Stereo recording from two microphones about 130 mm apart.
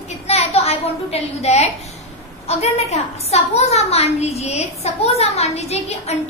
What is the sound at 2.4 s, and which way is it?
A woman's voice, 55° left (ahead or behind).